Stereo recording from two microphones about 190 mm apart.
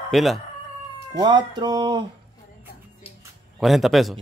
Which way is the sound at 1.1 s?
20° right (ahead or behind).